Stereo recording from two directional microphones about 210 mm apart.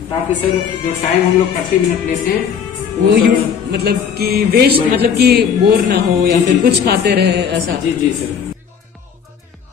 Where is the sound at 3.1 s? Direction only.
50° right (ahead or behind).